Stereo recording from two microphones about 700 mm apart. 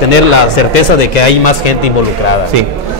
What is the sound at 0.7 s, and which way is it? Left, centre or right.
A man's voice, left.